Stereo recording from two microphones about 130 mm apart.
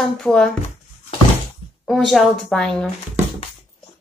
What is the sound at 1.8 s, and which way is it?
Speech, centre (ahead or behind).